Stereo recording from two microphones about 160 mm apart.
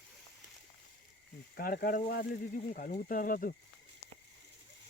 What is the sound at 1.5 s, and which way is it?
Speech, 65° left (ahead or behind).